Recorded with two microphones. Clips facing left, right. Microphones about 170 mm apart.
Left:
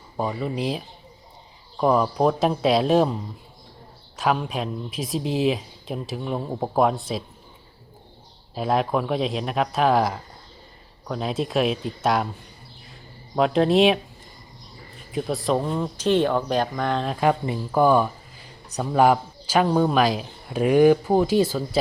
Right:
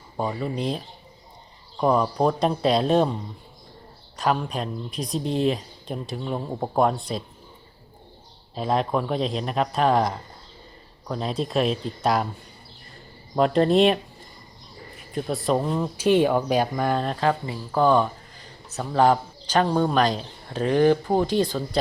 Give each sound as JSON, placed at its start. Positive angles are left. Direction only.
{"t": 0.2, "sound": "speech", "side_deg": 0}
{"t": 4.2, "sound": "speech", "side_deg": 5}
{"t": 8.5, "sound": "speech", "side_deg": 5}
{"t": 13.3, "sound": "speech", "side_deg": 0}
{"t": 15.1, "sound": "speech", "side_deg": 0}
{"t": 17.2, "sound": "speech", "side_deg": 15}